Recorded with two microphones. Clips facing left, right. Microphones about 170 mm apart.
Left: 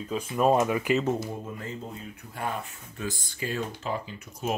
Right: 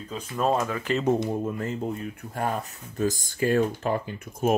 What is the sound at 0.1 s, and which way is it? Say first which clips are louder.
Speech: left 2 dB; 10° left (ahead or behind).